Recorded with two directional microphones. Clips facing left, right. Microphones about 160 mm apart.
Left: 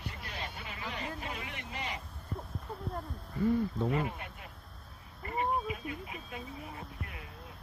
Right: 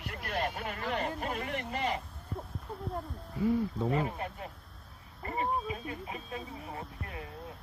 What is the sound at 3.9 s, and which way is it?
Speech, 35° right (ahead or behind).